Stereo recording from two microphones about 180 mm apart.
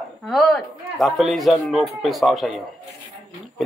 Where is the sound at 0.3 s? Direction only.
Centre (ahead or behind).